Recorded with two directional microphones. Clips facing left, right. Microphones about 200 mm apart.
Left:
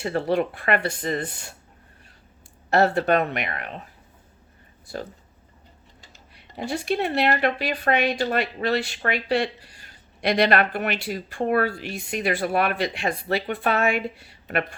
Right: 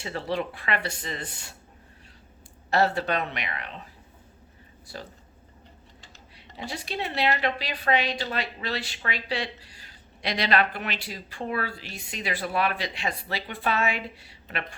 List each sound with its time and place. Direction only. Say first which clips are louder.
0.0 s speech: left 7 dB; 55° left (ahead or behind)
2.6 s speech: left 5 dB; 55° left (ahead or behind)
6.6 s speech: left 8 dB; 50° left (ahead or behind)